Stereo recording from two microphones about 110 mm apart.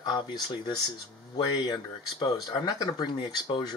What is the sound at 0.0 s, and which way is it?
Speech, 45° left (ahead or behind).